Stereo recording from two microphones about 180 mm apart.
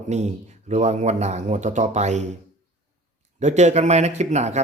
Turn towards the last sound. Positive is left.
turn(degrees=-40)  # may be behind; listen again after turning